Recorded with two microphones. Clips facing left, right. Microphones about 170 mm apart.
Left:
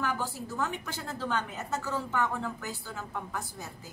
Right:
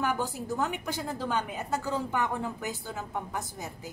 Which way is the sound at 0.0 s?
15° right (ahead or behind).